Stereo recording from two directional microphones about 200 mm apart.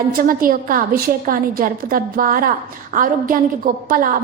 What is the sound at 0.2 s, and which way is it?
A woman's voice, 45° right (ahead or behind).